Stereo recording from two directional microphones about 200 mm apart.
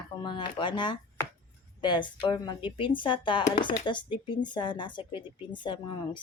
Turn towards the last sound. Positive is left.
turn(degrees=25)  # may be behind; listen again after turning